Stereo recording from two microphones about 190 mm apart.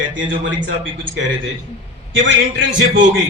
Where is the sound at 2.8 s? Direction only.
75° right (ahead or behind).